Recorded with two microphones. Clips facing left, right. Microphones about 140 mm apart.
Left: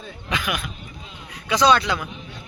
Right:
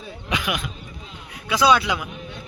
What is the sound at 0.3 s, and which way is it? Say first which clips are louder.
Speech: right 1 dB; 20° right (ahead or behind).